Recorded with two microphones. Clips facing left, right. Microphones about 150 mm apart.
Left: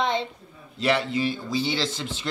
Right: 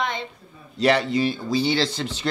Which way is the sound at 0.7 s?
40° right (ahead or behind).